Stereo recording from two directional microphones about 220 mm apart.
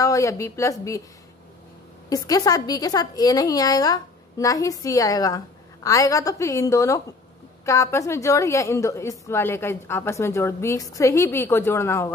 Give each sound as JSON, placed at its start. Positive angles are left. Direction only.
{"t": 0.0, "sound": "a woman's voice", "side_deg": 15}
{"t": 2.0, "sound": "a woman's voice", "side_deg": 15}